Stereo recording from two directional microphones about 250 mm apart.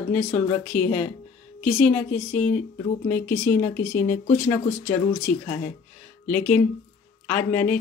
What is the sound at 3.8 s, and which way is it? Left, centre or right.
Speech, left.